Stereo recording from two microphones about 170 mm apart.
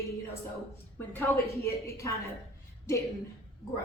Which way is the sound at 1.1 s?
10° left (ahead or behind).